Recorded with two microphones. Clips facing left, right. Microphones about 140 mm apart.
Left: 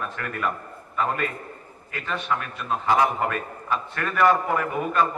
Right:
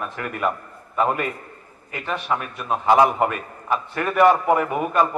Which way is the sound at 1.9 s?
20° right (ahead or behind).